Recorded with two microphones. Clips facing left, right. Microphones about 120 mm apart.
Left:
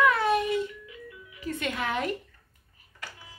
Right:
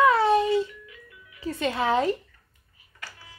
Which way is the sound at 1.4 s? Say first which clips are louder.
Right 5 dB; 30° right (ahead or behind).